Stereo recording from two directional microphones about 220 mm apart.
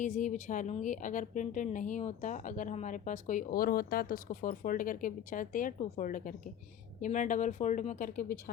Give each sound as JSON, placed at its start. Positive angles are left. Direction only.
{"t": 0.0, "sound": "speech", "side_deg": 35}